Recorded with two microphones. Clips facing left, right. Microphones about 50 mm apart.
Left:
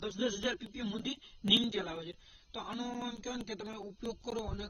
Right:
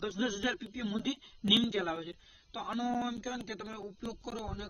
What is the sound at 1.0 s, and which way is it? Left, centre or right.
Speech, right.